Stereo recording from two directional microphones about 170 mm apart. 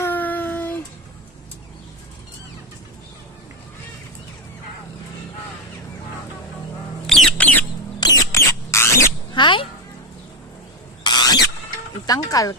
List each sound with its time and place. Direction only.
0.0 s child singing: 10° left (ahead or behind)
7.1 s bird: centre (ahead or behind)
7.9 s rodents: 25° left (ahead or behind)
11.0 s a sound: 25° left (ahead or behind)
12.0 s speech: 20° left (ahead or behind)